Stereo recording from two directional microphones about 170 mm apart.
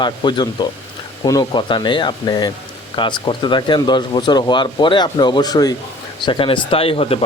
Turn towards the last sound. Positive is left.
turn(degrees=35)  # may be behind; listen again after turning